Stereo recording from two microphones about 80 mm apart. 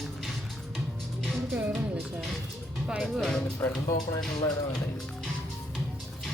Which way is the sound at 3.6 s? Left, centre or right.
Left.